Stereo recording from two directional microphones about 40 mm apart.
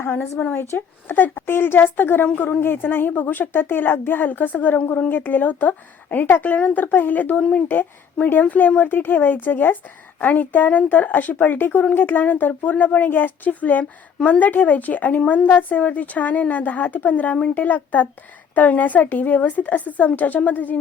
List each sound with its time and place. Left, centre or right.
0.1 s a woman's voice: left
1.5 s a woman's voice: left
2.2 s a woman's voice: left
2.6 s a woman's voice: left
5.4 s a woman's voice: left
7.7 s a woman's voice: left